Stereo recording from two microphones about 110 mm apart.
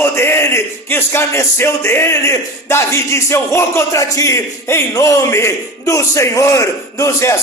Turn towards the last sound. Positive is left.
turn(degrees=25)  # may be behind; listen again after turning